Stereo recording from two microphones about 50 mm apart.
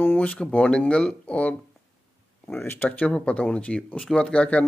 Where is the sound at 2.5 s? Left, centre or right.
Left.